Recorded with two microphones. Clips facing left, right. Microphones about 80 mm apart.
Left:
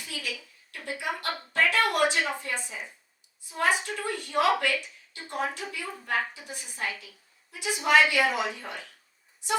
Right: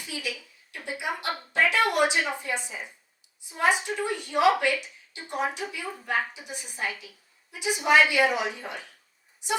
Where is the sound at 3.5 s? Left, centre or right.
Centre.